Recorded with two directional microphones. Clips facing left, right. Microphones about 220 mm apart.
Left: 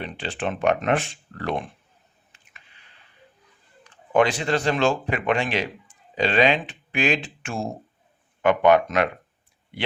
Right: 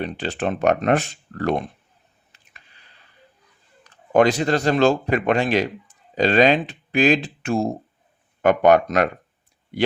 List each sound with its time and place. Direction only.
0.0 s speech: 40° right (ahead or behind)
2.3 s a sound: 35° right (ahead or behind)
4.1 s a man's voice: 40° right (ahead or behind)